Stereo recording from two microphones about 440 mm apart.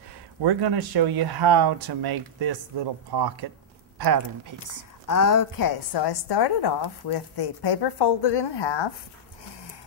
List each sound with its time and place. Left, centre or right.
0.4 s speech: right
5.0 s a woman's voice: left